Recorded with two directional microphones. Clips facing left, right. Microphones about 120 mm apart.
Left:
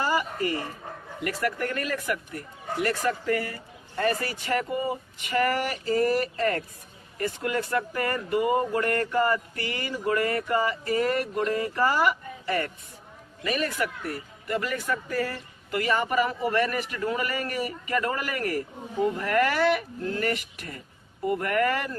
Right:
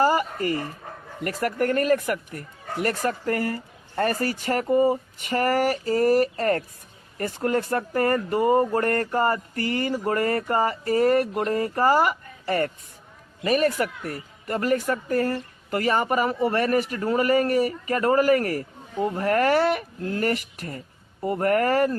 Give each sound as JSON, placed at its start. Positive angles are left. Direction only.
{"t": 0.0, "sound": "dog", "side_deg": -40}
{"t": 1.2, "sound": "speech", "side_deg": -45}